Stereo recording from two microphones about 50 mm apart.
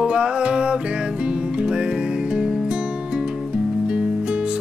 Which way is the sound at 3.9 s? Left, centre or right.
Right.